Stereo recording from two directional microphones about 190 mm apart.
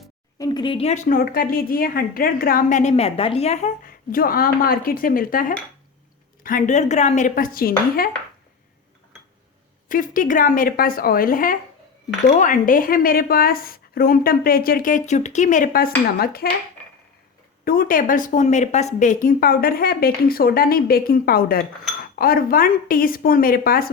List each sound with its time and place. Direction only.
0.3 s a woman's voice: 20° left (ahead or behind); by 8.1 s 50° left (ahead or behind)
9.9 s a woman's voice: 45° left (ahead or behind)
17.7 s a woman's voice: 50° left (ahead or behind)